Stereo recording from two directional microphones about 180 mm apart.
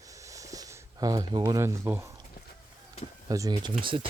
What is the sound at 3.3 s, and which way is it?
Speech, 20° right (ahead or behind).